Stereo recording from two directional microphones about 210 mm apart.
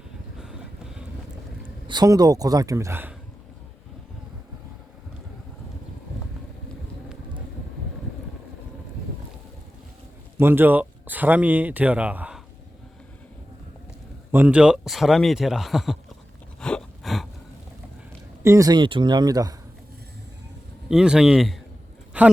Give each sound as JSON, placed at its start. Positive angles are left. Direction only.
{"t": 0.3, "sound": "vehicle", "side_deg": 0}
{"t": 1.9, "sound": "speech", "side_deg": -20}
{"t": 10.4, "sound": "speech", "side_deg": -10}
{"t": 14.3, "sound": "speech", "side_deg": -5}
{"t": 16.6, "sound": "a sound", "side_deg": 5}
{"t": 18.4, "sound": "speech", "side_deg": -15}
{"t": 20.9, "sound": "speech", "side_deg": -5}
{"t": 22.1, "sound": "a sound", "side_deg": -5}